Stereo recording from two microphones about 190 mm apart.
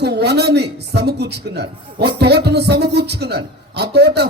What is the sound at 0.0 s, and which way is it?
A man's voice, 60° right (ahead or behind).